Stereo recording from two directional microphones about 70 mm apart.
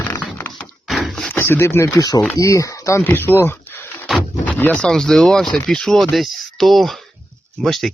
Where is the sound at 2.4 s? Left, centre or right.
Left.